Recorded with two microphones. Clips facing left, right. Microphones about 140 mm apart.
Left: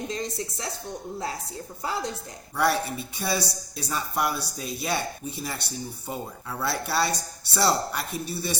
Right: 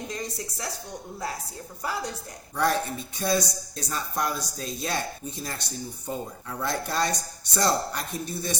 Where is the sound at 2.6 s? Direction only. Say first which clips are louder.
Left 1 dB; 10° left (ahead or behind).